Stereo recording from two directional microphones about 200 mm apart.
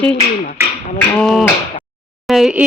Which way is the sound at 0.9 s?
5° left (ahead or behind).